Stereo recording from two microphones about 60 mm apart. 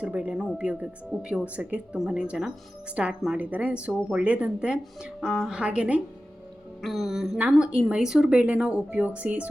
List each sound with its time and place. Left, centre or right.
0.0 s speech: right
5.5 s speech: centre
6.8 s music: centre
7.5 s speech: centre